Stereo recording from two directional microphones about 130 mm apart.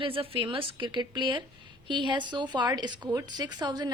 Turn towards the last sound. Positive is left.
turn(degrees=-35)  # may be behind; listen again after turning